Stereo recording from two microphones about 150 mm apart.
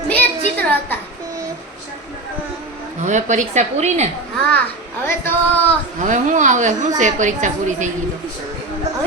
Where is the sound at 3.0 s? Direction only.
55° right (ahead or behind).